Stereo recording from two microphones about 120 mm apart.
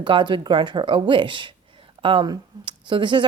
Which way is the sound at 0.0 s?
40° right (ahead or behind).